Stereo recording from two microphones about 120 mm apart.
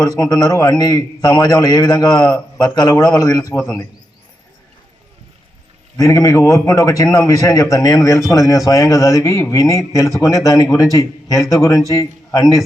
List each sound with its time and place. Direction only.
0.0 s a man's voice: 30° left (ahead or behind)
6.0 s a man's voice: 30° left (ahead or behind)